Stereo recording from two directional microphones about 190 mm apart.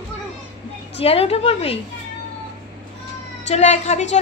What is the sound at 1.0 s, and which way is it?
Speech, 30° left (ahead or behind).